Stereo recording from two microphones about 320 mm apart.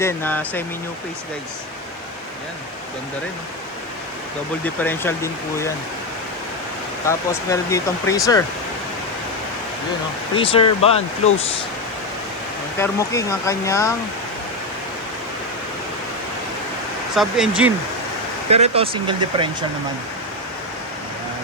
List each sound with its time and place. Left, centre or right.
0.0 s speech: centre
4.6 s speech: centre
7.1 s speech: centre
10.3 s speech: centre
12.8 s speech: centre
17.2 s speech: centre
18.5 s speech: centre